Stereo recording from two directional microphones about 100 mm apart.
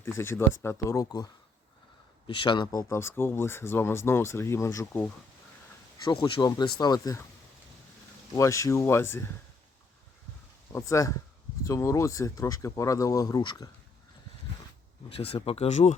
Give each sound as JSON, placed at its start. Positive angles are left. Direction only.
{"t": 0.0, "sound": "speech", "side_deg": 25}
{"t": 1.0, "sound": "speech", "side_deg": 40}
{"t": 2.2, "sound": "speech", "side_deg": 55}
{"t": 2.9, "sound": "speech", "side_deg": 25}
{"t": 6.1, "sound": "speech", "side_deg": 55}
{"t": 8.4, "sound": "speech", "side_deg": 30}
{"t": 10.7, "sound": "speech", "side_deg": 30}
{"t": 15.1, "sound": "speech", "side_deg": 75}